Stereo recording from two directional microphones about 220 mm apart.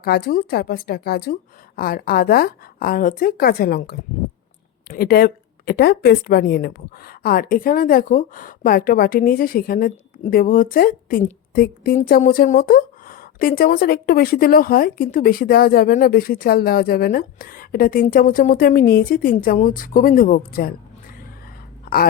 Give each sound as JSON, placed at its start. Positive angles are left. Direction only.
{"t": 0.0, "sound": "a woman's voice", "side_deg": 45}